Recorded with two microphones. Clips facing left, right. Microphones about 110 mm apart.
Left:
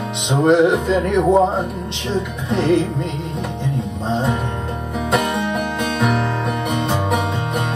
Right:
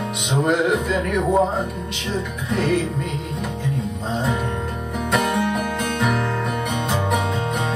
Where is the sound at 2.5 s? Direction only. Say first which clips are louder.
Left 4 dB; 25° left (ahead or behind).